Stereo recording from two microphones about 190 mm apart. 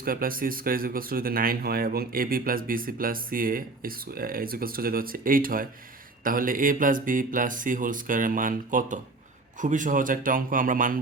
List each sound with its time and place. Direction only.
0.0 s speech: 50° right (ahead or behind)